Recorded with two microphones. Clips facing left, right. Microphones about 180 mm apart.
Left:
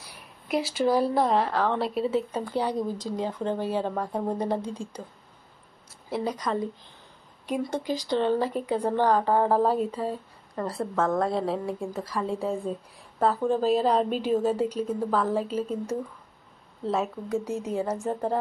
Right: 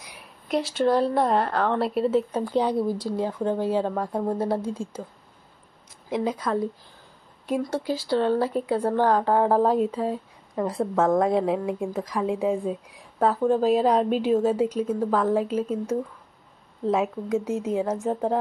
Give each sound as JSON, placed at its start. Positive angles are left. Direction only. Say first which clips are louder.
{"t": 0.5, "sound": "speech", "louder": "right 2 dB", "side_deg": 5}
{"t": 2.0, "sound": "speech", "louder": "right 4 dB", "side_deg": 10}
{"t": 2.5, "sound": "a woman's voice", "louder": "right 5 dB", "side_deg": -10}
{"t": 4.6, "sound": "speech", "louder": "right 4 dB", "side_deg": 15}
{"t": 6.0, "sound": "a woman's voice", "louder": "right 3 dB", "side_deg": -10}